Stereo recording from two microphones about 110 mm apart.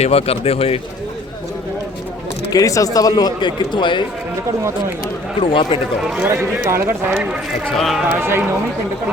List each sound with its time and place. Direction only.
0.0 s speech: 65° left (ahead or behind)
2.5 s a man's voice: 30° left (ahead or behind)
5.4 s speech: 50° left (ahead or behind)
6.7 s speech: 25° right (ahead or behind)
7.8 s speech: centre (ahead or behind)
8.1 s speech: 20° right (ahead or behind)